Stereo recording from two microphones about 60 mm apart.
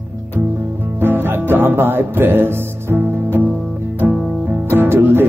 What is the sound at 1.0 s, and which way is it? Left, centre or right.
Music, right.